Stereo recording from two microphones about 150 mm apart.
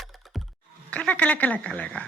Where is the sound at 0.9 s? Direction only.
10° left (ahead or behind).